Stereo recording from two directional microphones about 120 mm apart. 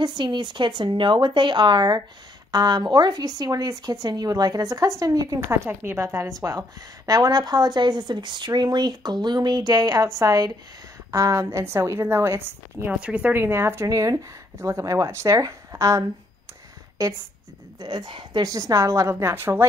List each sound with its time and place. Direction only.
0.0 s speech: 40° right (ahead or behind)
5.7 s a woman's voice: 15° right (ahead or behind)